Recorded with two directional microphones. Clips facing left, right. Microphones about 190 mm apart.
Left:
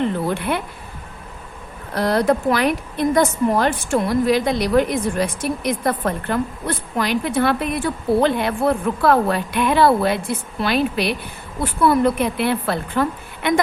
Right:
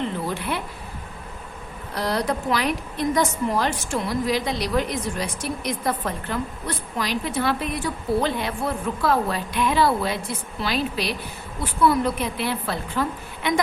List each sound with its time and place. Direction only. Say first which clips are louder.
0.3 s a woman's voice: left 5 dB; 60° left (ahead or behind)
2.0 s a woman's voice: left 7 dB; 50° left (ahead or behind)